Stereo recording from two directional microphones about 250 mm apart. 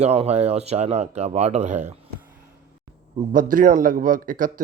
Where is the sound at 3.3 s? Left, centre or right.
Right.